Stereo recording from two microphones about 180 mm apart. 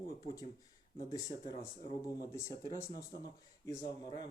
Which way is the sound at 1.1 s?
20° left (ahead or behind).